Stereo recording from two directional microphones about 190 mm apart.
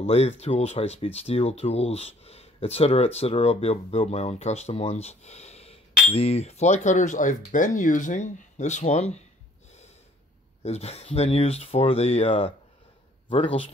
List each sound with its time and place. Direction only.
0.0 s speech: 35° left (ahead or behind)
10.6 s speech: 35° left (ahead or behind)